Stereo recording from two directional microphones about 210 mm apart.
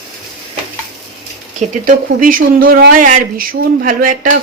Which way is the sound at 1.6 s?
40° right (ahead or behind).